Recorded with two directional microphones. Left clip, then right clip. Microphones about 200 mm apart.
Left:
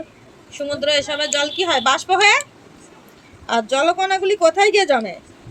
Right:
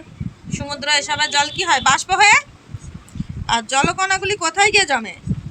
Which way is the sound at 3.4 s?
20° right (ahead or behind).